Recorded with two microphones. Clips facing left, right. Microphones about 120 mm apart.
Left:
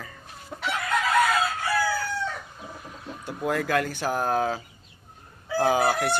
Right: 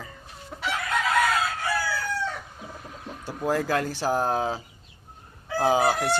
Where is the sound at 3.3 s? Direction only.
30° right (ahead or behind).